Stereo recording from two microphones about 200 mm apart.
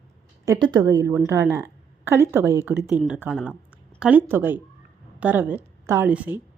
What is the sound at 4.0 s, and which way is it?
A woman's voice, 10° right (ahead or behind).